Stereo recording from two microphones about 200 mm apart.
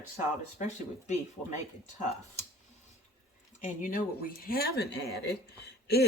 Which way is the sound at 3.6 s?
45° left (ahead or behind).